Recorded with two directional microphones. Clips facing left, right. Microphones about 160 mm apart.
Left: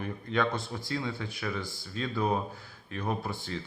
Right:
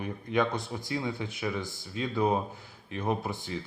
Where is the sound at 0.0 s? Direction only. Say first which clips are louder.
Right 1 dB; 15° right (ahead or behind).